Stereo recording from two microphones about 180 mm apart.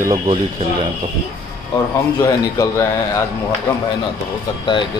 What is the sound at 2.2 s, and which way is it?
Speech, 15° left (ahead or behind).